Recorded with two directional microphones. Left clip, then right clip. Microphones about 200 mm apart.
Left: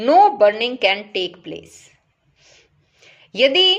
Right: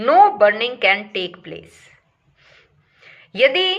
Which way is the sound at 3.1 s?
40° left (ahead or behind).